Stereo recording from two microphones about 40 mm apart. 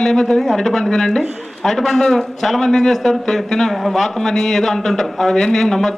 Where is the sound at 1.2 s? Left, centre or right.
Right.